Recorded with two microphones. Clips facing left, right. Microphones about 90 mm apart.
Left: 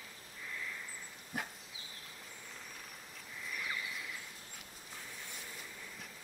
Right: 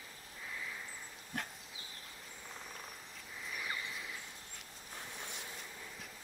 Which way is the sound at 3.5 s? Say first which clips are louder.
Even; 15° right (ahead or behind).